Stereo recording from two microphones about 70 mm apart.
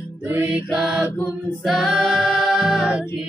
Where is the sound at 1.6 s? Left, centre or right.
Centre.